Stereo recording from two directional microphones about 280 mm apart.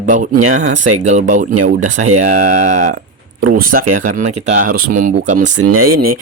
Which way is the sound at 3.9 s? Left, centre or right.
Right.